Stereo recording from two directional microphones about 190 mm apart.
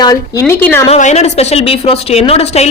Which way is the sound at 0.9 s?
40° left (ahead or behind).